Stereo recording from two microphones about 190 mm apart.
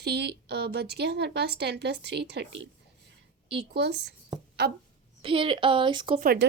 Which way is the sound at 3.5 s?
60° right (ahead or behind).